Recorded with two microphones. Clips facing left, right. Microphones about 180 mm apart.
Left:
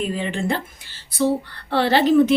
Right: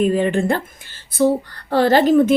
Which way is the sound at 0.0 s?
50° right (ahead or behind).